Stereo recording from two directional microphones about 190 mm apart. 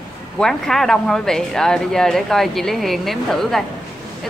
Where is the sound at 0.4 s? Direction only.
Centre (ahead or behind).